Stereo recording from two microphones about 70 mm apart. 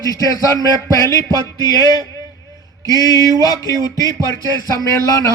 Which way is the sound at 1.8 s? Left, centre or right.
Left.